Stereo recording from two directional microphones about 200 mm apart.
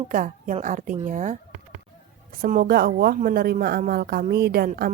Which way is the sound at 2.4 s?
45° right (ahead or behind).